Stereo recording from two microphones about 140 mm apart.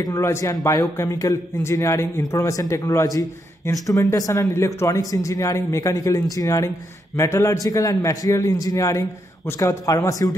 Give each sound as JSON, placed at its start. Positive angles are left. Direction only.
{"t": 0.0, "sound": "a man's voice", "side_deg": 20}